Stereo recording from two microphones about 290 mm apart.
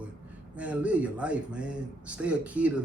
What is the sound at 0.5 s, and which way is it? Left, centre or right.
A man's voice, centre.